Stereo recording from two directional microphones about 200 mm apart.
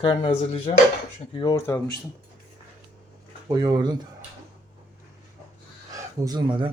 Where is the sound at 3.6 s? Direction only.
20° right (ahead or behind).